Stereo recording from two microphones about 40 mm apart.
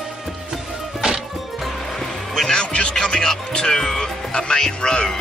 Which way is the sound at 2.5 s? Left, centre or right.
Left.